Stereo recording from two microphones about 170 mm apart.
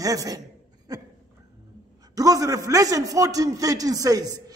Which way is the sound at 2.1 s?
20° right (ahead or behind).